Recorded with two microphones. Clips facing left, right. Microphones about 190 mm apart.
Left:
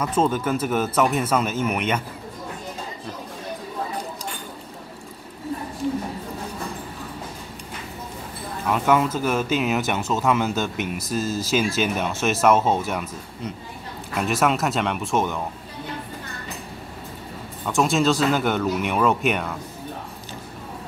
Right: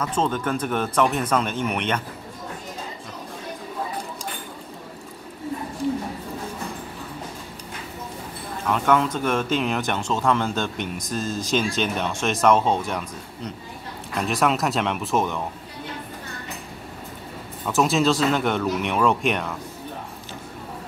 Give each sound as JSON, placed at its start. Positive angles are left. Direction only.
{"t": 0.0, "sound": "speech", "side_deg": 10}
{"t": 8.6, "sound": "speech", "side_deg": 10}
{"t": 14.1, "sound": "speech", "side_deg": 0}
{"t": 17.6, "sound": "speech", "side_deg": 0}